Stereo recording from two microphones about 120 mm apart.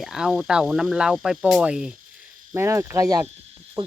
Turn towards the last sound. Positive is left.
turn(degrees=-30)  # may be behind; listen again after turning